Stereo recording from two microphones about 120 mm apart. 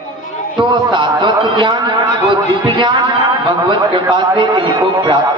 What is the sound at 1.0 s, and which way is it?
A man's voice, 40° right (ahead or behind).